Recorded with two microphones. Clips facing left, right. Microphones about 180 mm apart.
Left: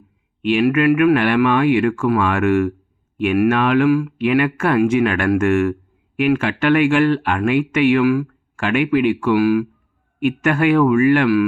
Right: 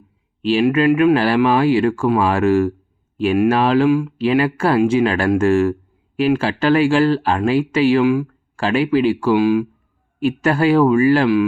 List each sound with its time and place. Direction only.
0.4 s speech: 30° right (ahead or behind)